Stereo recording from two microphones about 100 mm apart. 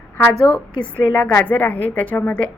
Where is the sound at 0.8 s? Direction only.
15° left (ahead or behind).